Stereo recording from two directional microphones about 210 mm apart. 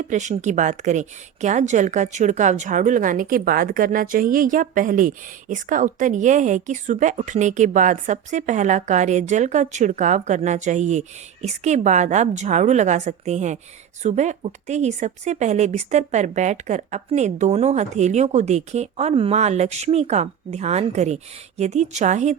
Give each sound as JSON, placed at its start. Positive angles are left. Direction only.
{"t": 0.0, "sound": "speech", "side_deg": -35}